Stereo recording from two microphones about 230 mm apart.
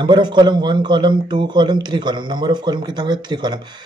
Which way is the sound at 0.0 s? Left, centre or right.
Centre.